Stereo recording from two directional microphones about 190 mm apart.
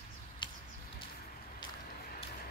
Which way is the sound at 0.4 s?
25° left (ahead or behind).